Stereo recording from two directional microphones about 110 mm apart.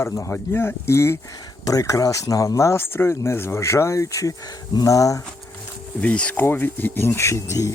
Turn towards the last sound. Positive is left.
turn(degrees=25)  # may be behind; listen again after turning